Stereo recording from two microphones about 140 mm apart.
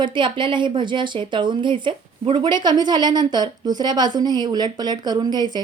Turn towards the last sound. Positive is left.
turn(degrees=-30)  # may be behind; listen again after turning